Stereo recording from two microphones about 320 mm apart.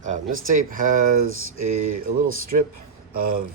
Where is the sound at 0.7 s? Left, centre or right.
Right.